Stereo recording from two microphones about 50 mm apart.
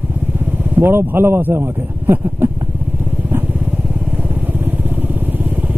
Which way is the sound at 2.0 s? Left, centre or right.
Right.